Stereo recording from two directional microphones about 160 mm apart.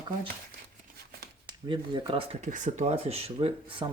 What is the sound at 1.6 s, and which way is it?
Speech, 30° right (ahead or behind).